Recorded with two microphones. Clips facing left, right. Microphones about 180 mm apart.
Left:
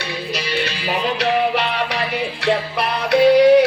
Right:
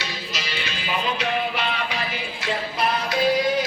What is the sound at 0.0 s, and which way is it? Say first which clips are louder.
Music: left 7 dB; 60° left (ahead or behind).